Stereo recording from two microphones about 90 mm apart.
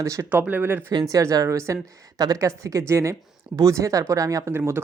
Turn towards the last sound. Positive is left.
turn(degrees=-25)  # may be behind; listen again after turning